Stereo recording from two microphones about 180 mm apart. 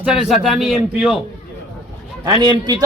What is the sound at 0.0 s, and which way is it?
Speech, 5° right (ahead or behind).